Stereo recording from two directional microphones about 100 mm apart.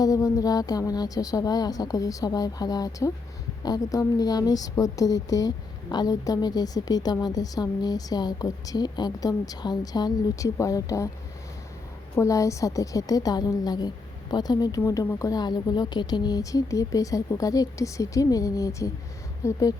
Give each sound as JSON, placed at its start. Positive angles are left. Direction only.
{"t": 0.0, "sound": "a woman's voice", "side_deg": 35}
{"t": 12.1, "sound": "a woman's voice", "side_deg": 30}